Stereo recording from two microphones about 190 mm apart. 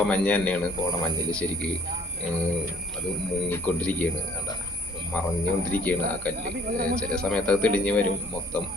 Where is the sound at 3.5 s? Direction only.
10° left (ahead or behind).